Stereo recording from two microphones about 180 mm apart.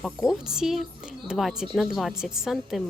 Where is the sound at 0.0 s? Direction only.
Centre (ahead or behind).